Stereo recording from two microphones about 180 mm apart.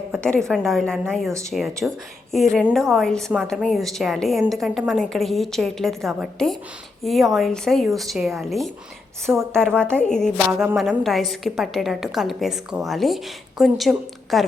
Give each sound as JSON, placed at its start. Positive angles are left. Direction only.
{"t": 0.1, "sound": "a woman's voice", "side_deg": 5}